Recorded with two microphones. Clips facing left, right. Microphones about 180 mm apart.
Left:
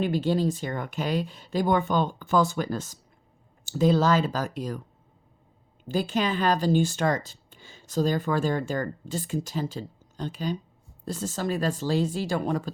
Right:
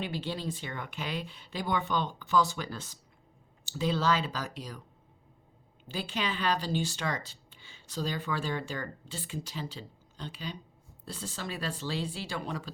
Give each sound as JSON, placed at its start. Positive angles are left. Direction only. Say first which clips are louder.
{"t": 0.0, "sound": "speech", "louder": "left 11 dB", "side_deg": 45}
{"t": 5.9, "sound": "speech", "louder": "left 8 dB", "side_deg": 45}